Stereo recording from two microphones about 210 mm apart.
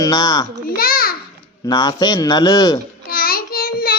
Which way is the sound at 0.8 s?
45° left (ahead or behind).